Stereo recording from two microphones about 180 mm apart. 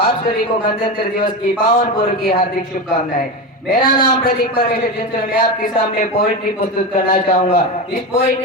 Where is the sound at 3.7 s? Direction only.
45° left (ahead or behind).